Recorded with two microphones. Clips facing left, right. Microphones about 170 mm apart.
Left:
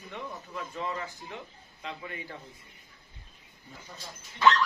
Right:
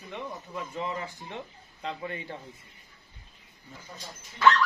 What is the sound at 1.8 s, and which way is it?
Speech, 35° right (ahead or behind).